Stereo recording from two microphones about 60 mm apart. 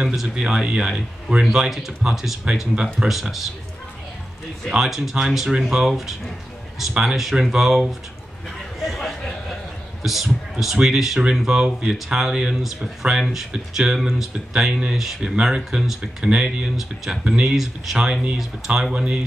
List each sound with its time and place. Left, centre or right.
0.0 s speech: centre
2.7 s speech: centre
3.1 s speech: centre
4.6 s speech: centre
8.8 s a sound: centre
10.0 s speech: centre
13.2 s speech: centre
16.7 s speech: centre
18.9 s speech: centre